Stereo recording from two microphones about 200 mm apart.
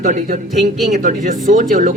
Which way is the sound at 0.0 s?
40° right (ahead or behind).